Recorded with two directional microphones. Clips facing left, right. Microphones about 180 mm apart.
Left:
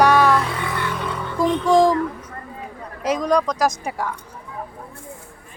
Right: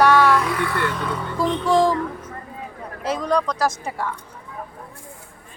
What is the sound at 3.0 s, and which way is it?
Speech, 15° left (ahead or behind).